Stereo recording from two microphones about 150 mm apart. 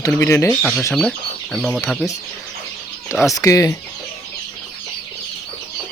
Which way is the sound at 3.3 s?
20° left (ahead or behind).